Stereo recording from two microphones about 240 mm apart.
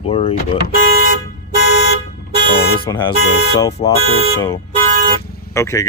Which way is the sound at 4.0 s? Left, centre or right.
Right.